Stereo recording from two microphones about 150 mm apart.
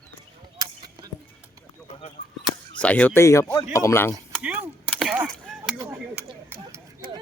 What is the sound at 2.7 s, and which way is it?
A man's voice, 10° left (ahead or behind).